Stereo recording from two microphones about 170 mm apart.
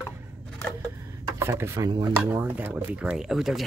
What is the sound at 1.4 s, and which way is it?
Speech, 15° right (ahead or behind).